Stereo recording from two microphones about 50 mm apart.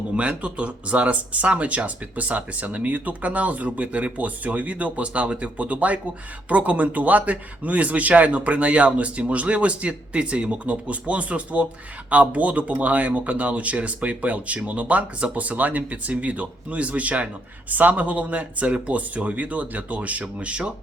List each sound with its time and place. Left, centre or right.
0.2 s speech: right